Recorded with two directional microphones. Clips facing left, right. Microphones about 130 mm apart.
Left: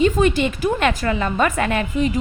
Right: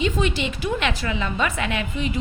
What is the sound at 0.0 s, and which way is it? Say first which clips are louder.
A woman's voice: left 7 dB; 50° left (ahead or behind).